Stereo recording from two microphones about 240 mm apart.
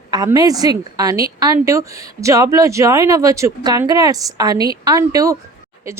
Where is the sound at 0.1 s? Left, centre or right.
Centre.